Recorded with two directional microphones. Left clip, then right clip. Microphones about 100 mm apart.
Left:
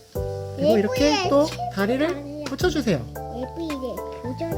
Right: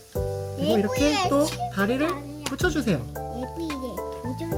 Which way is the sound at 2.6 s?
5° left (ahead or behind).